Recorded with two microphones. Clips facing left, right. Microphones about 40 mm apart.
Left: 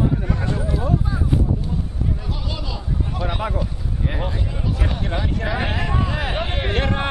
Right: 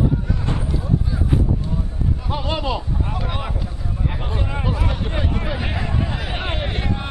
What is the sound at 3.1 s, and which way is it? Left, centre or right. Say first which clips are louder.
Speech: left 1 dB; centre.